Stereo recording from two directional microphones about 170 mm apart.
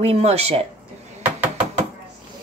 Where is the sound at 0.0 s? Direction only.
35° right (ahead or behind).